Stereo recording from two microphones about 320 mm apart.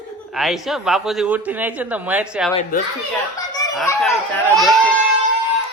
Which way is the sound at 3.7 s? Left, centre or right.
Centre.